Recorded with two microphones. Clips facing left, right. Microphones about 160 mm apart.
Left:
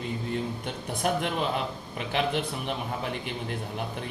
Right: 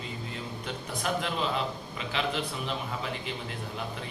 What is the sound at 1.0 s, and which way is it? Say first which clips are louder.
A man's voice: left 3 dB; 55° left (ahead or behind).